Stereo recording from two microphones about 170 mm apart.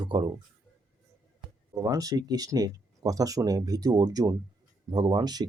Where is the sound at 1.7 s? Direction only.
20° right (ahead or behind).